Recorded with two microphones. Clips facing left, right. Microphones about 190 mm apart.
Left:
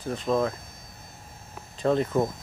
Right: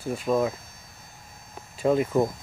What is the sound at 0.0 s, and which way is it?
Speech, 10° right (ahead or behind).